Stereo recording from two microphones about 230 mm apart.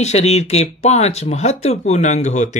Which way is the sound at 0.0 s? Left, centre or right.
Left.